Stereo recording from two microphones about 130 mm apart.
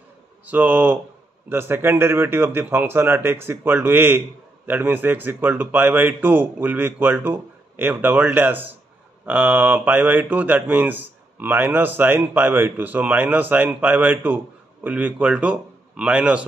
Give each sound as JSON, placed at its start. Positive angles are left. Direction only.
{"t": 0.5, "sound": "speech", "side_deg": -15}